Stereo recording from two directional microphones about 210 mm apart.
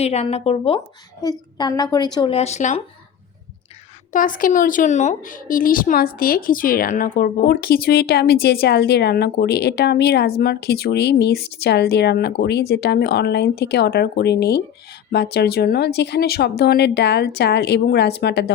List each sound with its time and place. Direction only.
0.0 s a woman's voice: 30° left (ahead or behind)
4.1 s a woman's voice: 40° left (ahead or behind)